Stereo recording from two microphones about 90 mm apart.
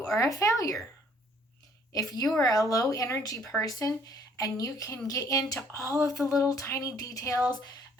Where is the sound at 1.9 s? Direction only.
45° left (ahead or behind).